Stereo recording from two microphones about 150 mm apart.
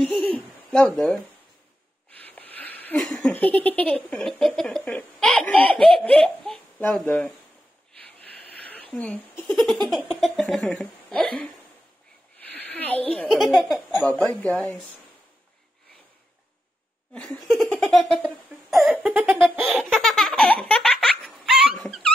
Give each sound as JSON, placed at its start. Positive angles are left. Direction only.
{"t": 0.0, "sound": "a sound", "side_deg": 5}
{"t": 7.9, "sound": "giggle", "side_deg": 10}
{"t": 9.8, "sound": "speech", "side_deg": 0}
{"t": 13.8, "sound": "speech", "side_deg": 10}
{"t": 17.1, "sound": "speech", "side_deg": 10}
{"t": 18.7, "sound": "a sound", "side_deg": 0}
{"t": 19.5, "sound": "baby laughter", "side_deg": 0}